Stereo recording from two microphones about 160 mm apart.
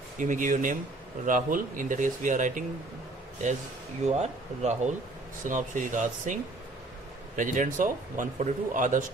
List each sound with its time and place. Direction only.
0.2 s speech: 55° right (ahead or behind)
4.0 s a man's voice: 45° right (ahead or behind)